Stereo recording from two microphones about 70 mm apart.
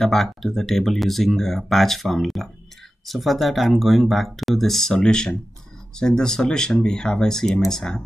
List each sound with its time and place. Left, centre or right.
0.0 s speech: centre